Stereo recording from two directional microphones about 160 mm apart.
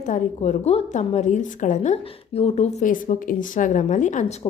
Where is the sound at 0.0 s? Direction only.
50° left (ahead or behind).